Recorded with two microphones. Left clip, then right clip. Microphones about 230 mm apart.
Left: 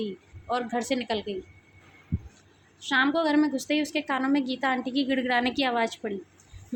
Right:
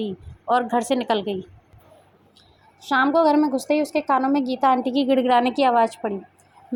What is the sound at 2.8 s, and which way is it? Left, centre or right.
A woman's voice, centre.